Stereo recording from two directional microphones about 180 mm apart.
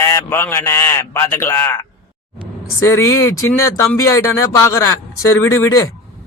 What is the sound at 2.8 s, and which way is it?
A man's voice, 15° left (ahead or behind).